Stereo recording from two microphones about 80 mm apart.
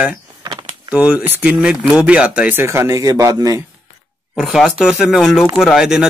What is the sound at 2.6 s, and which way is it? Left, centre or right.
Speech, right.